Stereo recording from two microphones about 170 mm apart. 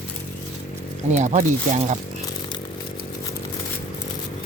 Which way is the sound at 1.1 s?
45° right (ahead or behind).